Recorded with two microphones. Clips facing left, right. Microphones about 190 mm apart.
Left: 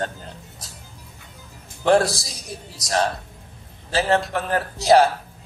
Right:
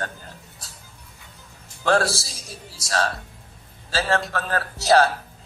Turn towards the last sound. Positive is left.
turn(degrees=15)  # may be behind; listen again after turning